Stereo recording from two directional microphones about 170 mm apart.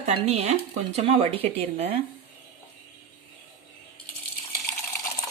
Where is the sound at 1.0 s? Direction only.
35° right (ahead or behind).